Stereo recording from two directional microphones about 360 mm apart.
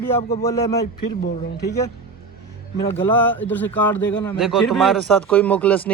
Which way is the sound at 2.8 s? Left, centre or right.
Centre.